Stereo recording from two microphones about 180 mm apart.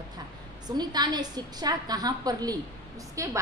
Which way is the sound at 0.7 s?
25° right (ahead or behind).